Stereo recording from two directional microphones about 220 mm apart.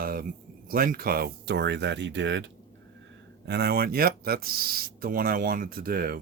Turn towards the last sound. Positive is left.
turn(degrees=-40)  # may be behind; listen again after turning